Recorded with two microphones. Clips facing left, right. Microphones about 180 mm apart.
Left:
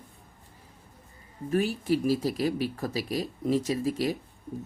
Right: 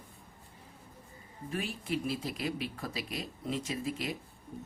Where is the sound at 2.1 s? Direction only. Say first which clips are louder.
Left 9 dB; 40° left (ahead or behind).